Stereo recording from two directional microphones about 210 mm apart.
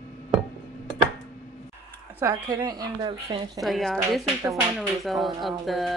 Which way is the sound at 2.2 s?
15° right (ahead or behind).